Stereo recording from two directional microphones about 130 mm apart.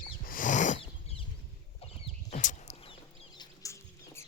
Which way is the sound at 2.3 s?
75° left (ahead or behind).